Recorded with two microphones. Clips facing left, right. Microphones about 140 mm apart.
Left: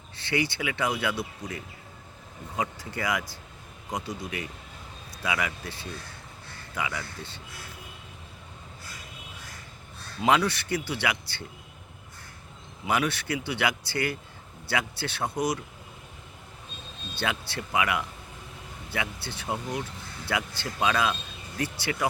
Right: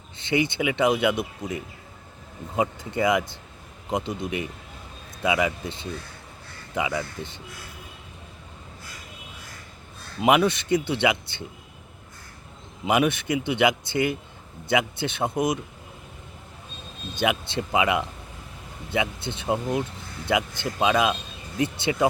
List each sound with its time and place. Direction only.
0.2 s speech: 20° right (ahead or behind)
10.2 s speech: 20° right (ahead or behind)
12.8 s speech: 20° right (ahead or behind)
17.2 s speech: 20° right (ahead or behind)